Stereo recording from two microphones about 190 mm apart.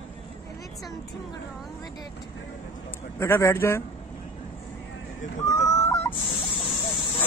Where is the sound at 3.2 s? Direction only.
15° left (ahead or behind).